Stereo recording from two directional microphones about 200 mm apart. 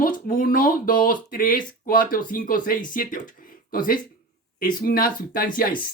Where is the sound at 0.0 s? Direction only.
45° left (ahead or behind).